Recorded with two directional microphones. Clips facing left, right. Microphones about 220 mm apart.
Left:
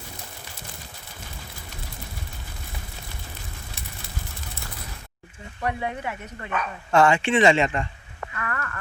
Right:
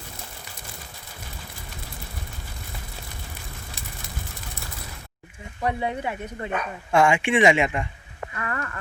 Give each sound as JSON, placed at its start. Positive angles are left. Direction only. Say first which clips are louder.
{"t": 5.6, "sound": "speech", "louder": "right 2 dB", "side_deg": -25}
{"t": 6.9, "sound": "speech", "louder": "left 1 dB", "side_deg": -10}
{"t": 8.4, "sound": "a sound", "louder": "right 1 dB", "side_deg": -20}